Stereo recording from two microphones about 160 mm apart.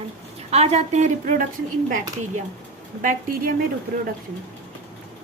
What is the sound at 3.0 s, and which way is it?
Speech, 55° right (ahead or behind).